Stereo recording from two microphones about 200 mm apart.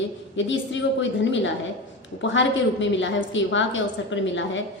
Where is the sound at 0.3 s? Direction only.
65° left (ahead or behind).